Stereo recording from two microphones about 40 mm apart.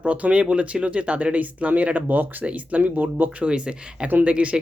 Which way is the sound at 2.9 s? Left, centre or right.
Right.